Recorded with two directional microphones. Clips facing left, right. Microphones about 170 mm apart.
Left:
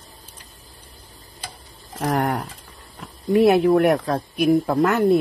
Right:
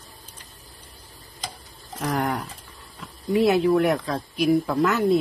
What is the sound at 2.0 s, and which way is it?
Pigeon, 55° left (ahead or behind).